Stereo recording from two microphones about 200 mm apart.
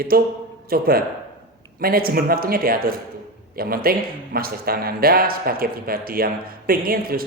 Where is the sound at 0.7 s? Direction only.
50° right (ahead or behind).